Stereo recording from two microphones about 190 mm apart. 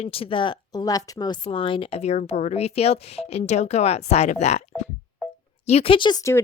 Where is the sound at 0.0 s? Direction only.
30° left (ahead or behind).